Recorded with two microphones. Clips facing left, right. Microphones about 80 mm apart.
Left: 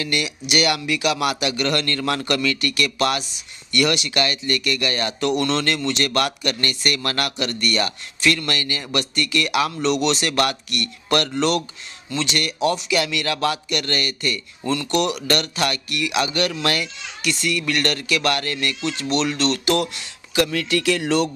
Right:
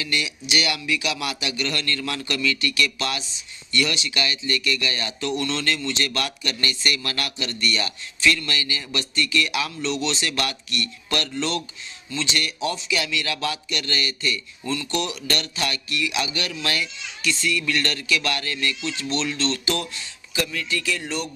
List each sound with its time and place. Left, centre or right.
0.0 s a man's voice: left